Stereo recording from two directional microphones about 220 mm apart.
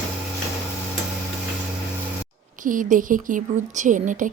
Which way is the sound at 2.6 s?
35° right (ahead or behind).